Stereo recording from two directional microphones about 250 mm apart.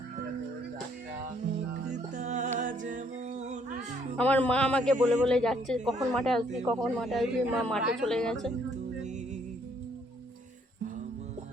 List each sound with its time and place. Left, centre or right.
1.9 s music: right
2.6 s a capella: right
4.2 s a man's voice: centre